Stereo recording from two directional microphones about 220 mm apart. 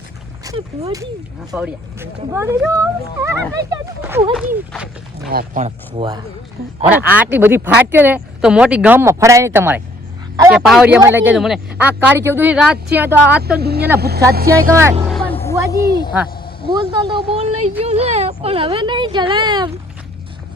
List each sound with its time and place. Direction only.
0.4 s speech: 20° right (ahead or behind)
1.5 s speech: 10° right (ahead or behind)
5.3 s speech: 40° right (ahead or behind)
6.8 s a man's voice: 5° right (ahead or behind)
13.6 s speech: 45° right (ahead or behind)
14.7 s speech: 10° right (ahead or behind)
15.0 s vehicle: centre (ahead or behind)
15.7 s speech: 20° left (ahead or behind)
16.7 s speech: 20° right (ahead or behind)